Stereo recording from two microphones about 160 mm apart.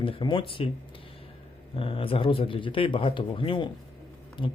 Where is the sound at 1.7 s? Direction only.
35° left (ahead or behind).